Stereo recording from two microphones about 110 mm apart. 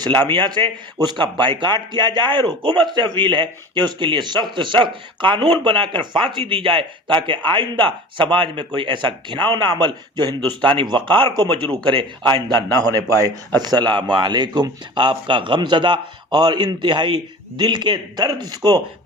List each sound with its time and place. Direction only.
0.2 s a man's voice: 45° right (ahead or behind)
13.6 s a man's voice: 40° right (ahead or behind)